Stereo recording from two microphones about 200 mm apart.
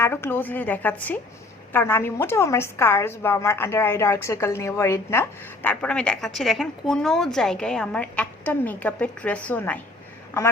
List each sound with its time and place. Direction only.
0.0 s a woman's voice: 10° left (ahead or behind)